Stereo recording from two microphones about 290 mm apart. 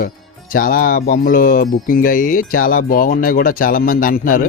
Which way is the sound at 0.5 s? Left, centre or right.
Left.